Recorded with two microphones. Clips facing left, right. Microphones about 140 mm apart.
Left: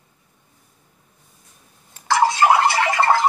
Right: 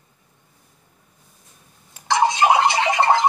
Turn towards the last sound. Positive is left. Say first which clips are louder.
# even
turn(degrees=-20)  # may be behind; listen again after turning